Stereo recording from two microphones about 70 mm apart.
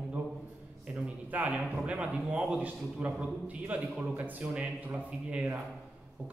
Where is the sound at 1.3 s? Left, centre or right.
Centre.